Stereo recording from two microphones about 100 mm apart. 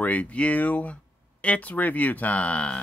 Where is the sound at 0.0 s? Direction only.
15° left (ahead or behind).